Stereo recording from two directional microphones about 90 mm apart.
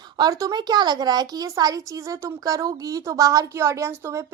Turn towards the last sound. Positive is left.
turn(degrees=-30)  # may be behind; listen again after turning